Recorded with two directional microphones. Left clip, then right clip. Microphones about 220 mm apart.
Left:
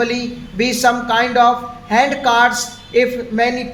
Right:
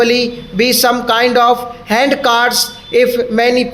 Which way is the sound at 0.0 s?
40° right (ahead or behind).